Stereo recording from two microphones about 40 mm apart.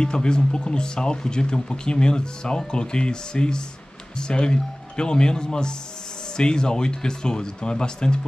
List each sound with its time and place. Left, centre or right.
0.0 s speech: left